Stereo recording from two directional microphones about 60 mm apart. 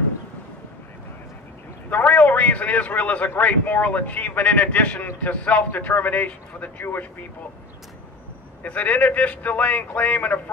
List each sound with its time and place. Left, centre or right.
1.9 s a man's voice: left
8.6 s a man's voice: left